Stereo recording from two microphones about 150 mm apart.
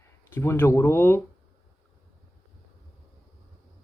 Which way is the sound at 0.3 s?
15° left (ahead or behind).